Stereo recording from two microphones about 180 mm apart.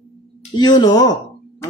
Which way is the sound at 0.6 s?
25° left (ahead or behind).